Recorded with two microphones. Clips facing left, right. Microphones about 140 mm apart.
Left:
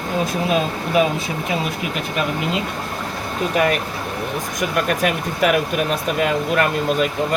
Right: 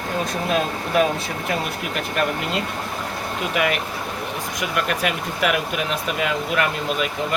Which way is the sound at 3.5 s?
40° left (ahead or behind).